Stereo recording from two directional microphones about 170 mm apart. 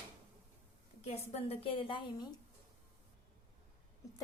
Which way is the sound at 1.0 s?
40° left (ahead or behind).